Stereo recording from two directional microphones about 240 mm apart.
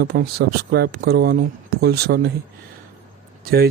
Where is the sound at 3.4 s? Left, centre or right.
Right.